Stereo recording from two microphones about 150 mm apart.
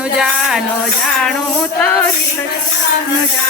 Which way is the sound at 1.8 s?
10° left (ahead or behind).